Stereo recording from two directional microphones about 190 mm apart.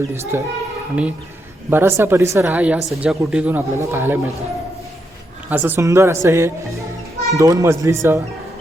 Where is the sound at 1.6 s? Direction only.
10° right (ahead or behind).